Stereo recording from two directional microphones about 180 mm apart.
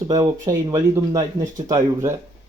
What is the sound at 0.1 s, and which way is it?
Speech, 25° right (ahead or behind).